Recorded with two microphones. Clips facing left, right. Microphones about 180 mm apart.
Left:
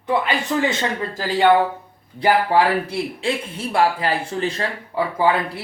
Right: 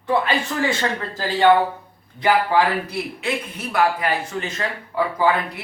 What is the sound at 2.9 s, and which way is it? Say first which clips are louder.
A man's voice: left 2 dB; 30° left (ahead or behind).